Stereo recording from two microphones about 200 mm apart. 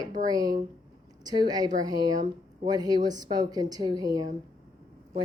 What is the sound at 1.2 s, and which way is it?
Speech, 20° right (ahead or behind).